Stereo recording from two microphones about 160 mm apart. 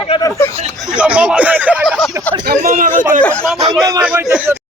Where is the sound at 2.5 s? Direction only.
55° right (ahead or behind).